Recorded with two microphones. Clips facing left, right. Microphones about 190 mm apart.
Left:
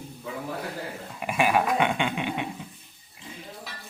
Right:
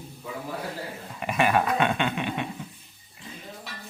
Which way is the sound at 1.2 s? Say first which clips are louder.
Even; 5° left (ahead or behind).